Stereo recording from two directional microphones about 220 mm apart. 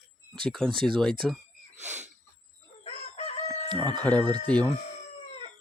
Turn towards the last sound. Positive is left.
turn(degrees=5)  # may be behind; listen again after turning